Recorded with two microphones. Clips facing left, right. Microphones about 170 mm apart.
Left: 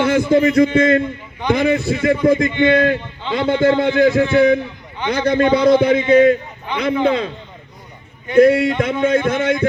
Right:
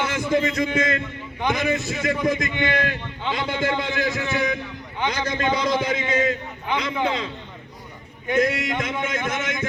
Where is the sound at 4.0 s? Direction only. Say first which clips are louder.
Left 12 dB; 30° left (ahead or behind).